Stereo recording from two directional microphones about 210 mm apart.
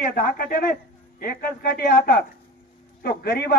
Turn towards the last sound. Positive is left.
turn(degrees=50)  # may be behind; listen again after turning